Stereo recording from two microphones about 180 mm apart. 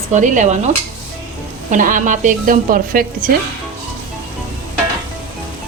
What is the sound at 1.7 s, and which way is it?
Speech, 45° right (ahead or behind).